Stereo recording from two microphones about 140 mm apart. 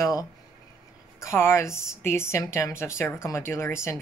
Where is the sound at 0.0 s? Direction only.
25° left (ahead or behind).